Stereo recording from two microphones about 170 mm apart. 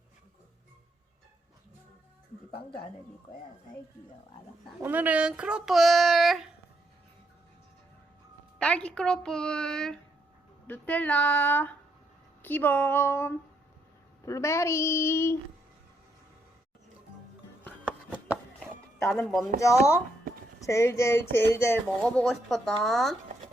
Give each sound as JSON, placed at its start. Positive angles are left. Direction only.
{"t": 4.8, "sound": "speech", "side_deg": -10}
{"t": 8.5, "sound": "speech", "side_deg": 5}
{"t": 17.8, "sound": "a sound", "side_deg": -5}
{"t": 19.2, "sound": "speech", "side_deg": 0}
{"t": 19.5, "sound": "speech", "side_deg": 15}